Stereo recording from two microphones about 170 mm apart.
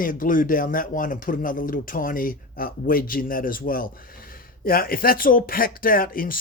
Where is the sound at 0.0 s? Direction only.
55° left (ahead or behind).